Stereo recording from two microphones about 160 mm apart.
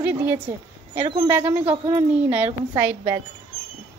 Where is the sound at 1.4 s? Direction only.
40° right (ahead or behind).